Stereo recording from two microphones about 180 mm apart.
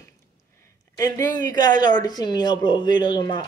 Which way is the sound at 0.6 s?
15° left (ahead or behind).